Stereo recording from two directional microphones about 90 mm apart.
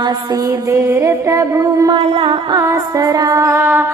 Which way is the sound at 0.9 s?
30° right (ahead or behind).